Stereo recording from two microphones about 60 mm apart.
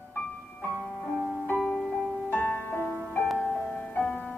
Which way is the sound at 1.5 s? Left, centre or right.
Left.